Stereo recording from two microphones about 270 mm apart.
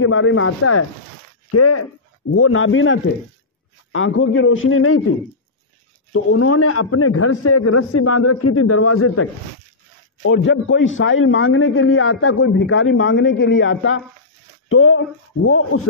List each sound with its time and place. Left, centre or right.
0.0 s a man's voice: left
2.3 s a man's voice: left
6.1 s a man's voice: left